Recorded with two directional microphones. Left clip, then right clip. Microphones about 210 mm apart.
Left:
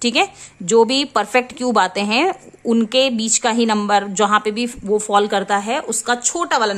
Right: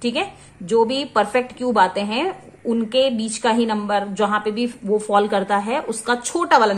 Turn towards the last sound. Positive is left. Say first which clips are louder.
# right 2 dB
turn(degrees=20)  # may be behind; listen again after turning